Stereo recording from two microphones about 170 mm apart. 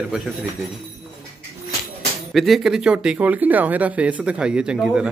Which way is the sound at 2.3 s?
Centre (ahead or behind).